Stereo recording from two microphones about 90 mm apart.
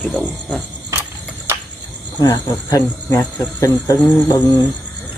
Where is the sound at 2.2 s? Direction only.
45° left (ahead or behind).